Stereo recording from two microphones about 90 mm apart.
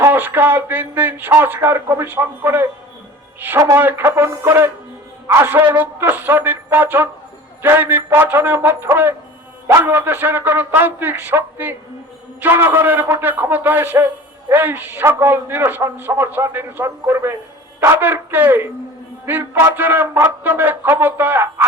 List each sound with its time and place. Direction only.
0.0 s a man's voice: 25° right (ahead or behind)
3.8 s a man's voice: 25° right (ahead or behind)